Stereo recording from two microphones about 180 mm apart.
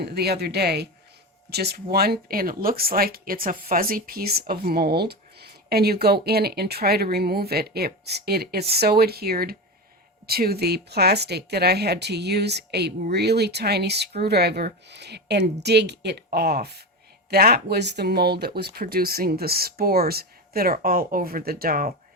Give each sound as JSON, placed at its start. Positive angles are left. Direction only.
{"t": 0.0, "sound": "speech", "side_deg": -65}